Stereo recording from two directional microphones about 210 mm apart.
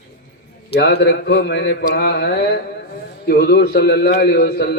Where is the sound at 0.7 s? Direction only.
50° left (ahead or behind).